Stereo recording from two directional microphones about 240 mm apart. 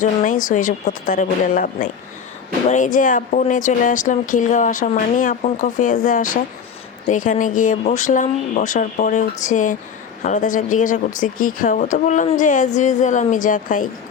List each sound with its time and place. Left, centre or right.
0.0 s speech: left